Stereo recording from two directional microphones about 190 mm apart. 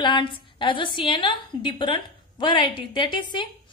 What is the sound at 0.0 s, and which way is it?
A woman's voice, 25° left (ahead or behind).